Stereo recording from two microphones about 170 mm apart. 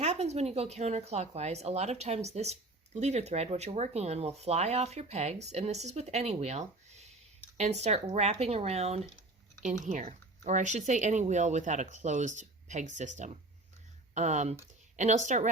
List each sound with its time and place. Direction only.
0.0 s speech: 40° right (ahead or behind)